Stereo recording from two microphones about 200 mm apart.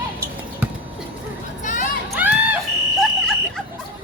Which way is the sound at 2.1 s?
10° right (ahead or behind).